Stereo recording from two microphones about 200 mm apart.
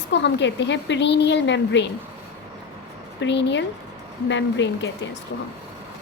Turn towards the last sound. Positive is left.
turn(degrees=60)  # may be behind; listen again after turning